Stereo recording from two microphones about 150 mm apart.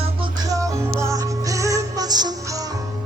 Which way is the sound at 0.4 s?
20° right (ahead or behind).